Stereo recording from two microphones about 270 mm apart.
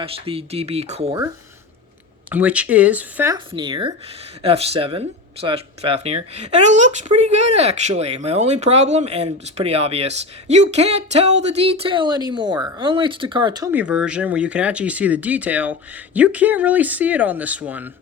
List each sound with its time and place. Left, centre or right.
0.0 s speech: right
2.3 s speech: centre